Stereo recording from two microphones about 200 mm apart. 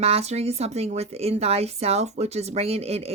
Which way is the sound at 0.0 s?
30° right (ahead or behind).